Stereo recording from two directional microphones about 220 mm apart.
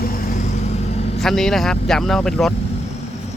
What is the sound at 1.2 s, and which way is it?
Speech, centre (ahead or behind).